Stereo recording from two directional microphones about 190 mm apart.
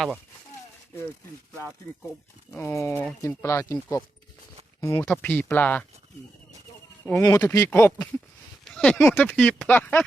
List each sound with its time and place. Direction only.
2.5 s speech: 10° left (ahead or behind)
5.0 s speech: 5° left (ahead or behind)
7.2 s speech: 15° left (ahead or behind)